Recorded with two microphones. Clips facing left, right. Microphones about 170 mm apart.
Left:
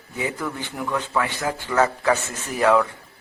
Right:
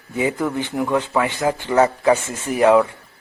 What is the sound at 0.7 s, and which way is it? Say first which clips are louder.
Speech: right 7 dB; 45° right (ahead or behind).